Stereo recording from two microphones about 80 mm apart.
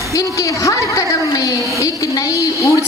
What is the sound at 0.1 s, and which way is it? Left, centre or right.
A woman's voice, left.